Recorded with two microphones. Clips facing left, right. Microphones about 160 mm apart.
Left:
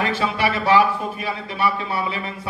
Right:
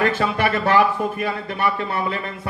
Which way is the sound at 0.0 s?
50° right (ahead or behind).